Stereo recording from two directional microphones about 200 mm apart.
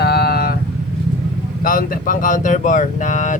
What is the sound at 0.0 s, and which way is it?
Vehicle, 55° left (ahead or behind).